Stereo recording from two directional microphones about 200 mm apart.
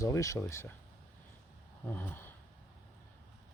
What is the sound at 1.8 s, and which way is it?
Speech, 10° left (ahead or behind).